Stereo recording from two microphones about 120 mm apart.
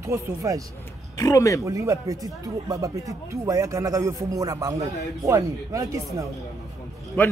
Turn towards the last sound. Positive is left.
turn(degrees=10)  # may be behind; listen again after turning